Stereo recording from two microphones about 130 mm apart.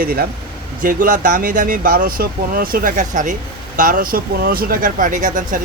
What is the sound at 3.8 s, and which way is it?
Speech, 90° right.